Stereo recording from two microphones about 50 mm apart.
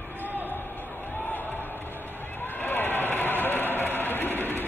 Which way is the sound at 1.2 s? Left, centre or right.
Left.